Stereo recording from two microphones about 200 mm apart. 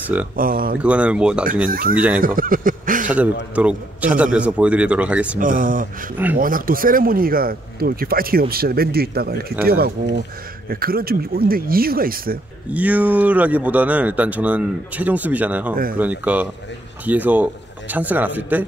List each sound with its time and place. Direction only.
0.4 s speech: 45° right (ahead or behind)
0.7 s speech: 5° right (ahead or behind)
1.7 s speech: 45° right (ahead or behind)
2.0 s speech: 5° right (ahead or behind)
2.2 s speech: 45° right (ahead or behind)
3.5 s speech: 5° right (ahead or behind)
5.4 s speech: 45° right (ahead or behind)
12.7 s speech: 5° right (ahead or behind)
15.7 s speech: 45° right (ahead or behind)
16.0 s speech: 10° right (ahead or behind)